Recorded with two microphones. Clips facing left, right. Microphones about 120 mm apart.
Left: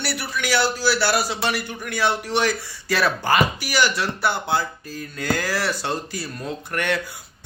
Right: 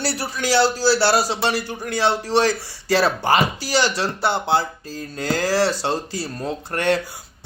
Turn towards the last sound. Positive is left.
turn(degrees=-35)  # may be behind; listen again after turning